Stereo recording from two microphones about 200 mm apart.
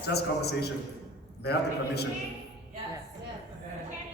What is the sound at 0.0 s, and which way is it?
A man's voice, 55° left (ahead or behind).